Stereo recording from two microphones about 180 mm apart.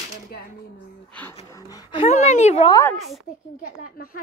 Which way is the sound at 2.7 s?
15° left (ahead or behind).